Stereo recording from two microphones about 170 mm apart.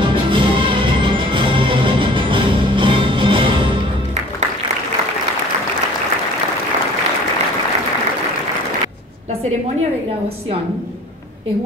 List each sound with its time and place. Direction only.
0.0 s music: 30° right (ahead or behind)